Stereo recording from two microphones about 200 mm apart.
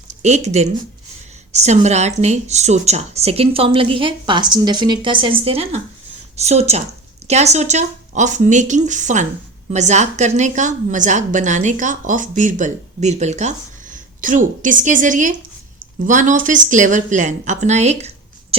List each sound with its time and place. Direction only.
0.2 s a woman's voice: 35° right (ahead or behind)